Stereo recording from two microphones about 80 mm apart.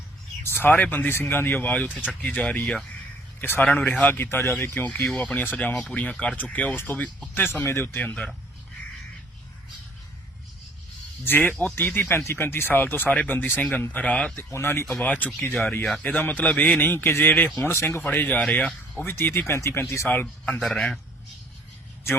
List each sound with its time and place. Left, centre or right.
0.4 s speech: left
7.9 s speech: centre
11.2 s speech: left
14.0 s speech: centre
14.3 s speech: left
14.8 s speech: centre
17.7 s speech: left
20.2 s speech: centre
20.6 s a man's voice: centre